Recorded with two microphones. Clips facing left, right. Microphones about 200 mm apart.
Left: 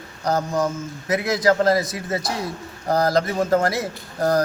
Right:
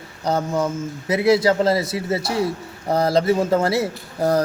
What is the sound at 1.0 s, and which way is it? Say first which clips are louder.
A man's voice: right 3 dB; 30° right (ahead or behind).